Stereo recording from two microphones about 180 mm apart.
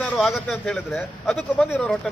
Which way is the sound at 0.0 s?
Centre (ahead or behind).